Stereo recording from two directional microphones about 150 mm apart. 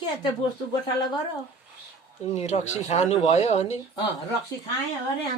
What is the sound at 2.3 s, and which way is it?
Speech, 50° left (ahead or behind).